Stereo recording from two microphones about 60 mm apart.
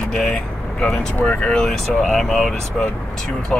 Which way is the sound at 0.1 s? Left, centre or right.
Centre.